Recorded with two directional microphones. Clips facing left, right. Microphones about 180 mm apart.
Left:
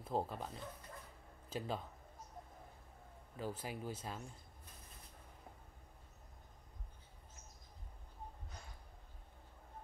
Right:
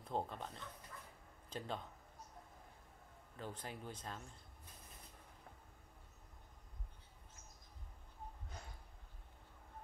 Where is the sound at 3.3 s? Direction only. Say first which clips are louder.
Left 5 dB; 5° left (ahead or behind).